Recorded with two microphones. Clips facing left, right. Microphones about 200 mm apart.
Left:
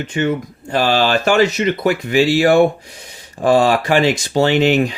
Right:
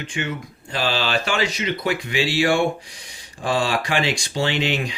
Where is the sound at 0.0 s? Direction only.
45° left (ahead or behind).